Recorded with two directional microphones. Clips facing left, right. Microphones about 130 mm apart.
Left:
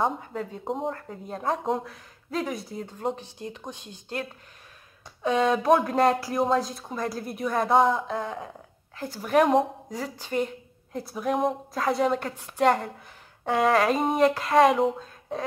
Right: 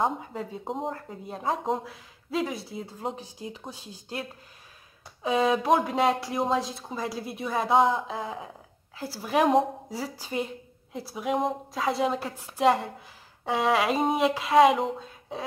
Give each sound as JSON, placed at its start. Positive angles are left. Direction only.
{"t": 0.0, "sound": "speech", "side_deg": 0}
{"t": 5.2, "sound": "speech", "side_deg": -5}
{"t": 10.0, "sound": "a woman's voice", "side_deg": -35}
{"t": 10.9, "sound": "speech", "side_deg": 0}